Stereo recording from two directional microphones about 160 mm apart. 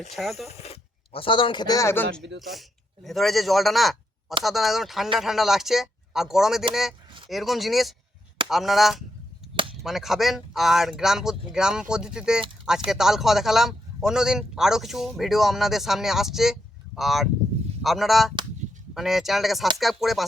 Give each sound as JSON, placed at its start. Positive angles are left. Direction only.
{"t": 0.1, "sound": "a man's voice", "side_deg": 0}
{"t": 0.4, "sound": "speech", "side_deg": 40}
{"t": 2.4, "sound": "a man's voice", "side_deg": 0}